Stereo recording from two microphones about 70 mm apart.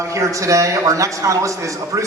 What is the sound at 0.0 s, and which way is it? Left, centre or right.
A man's voice, right.